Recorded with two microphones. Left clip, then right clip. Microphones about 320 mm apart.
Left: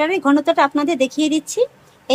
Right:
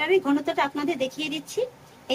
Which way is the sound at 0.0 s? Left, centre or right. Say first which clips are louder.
Left 6 dB; centre.